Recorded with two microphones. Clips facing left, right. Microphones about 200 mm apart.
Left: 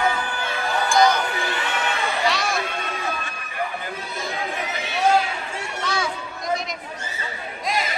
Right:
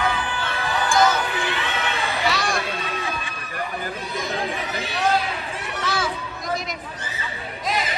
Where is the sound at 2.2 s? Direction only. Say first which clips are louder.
Even; centre (ahead or behind).